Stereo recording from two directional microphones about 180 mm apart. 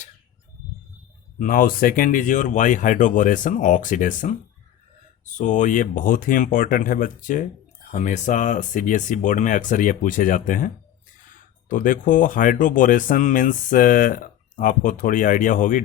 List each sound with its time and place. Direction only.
1.4 s speech: 50° left (ahead or behind)
11.7 s speech: 45° left (ahead or behind)